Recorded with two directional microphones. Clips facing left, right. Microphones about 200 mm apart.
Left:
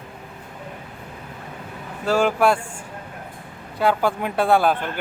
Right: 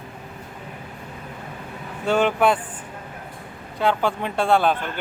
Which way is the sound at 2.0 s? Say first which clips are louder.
Left 1 dB; 5° left (ahead or behind).